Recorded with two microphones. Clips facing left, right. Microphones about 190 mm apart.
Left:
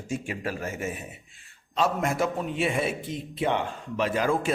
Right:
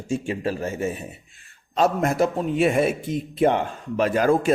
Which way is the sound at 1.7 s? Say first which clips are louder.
Right 5 dB; 45° right (ahead or behind).